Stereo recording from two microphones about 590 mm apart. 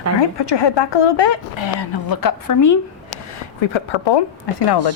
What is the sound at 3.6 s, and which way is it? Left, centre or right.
Speech, left.